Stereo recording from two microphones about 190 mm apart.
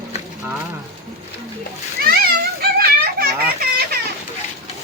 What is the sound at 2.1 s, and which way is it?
Children playing, 50° right (ahead or behind).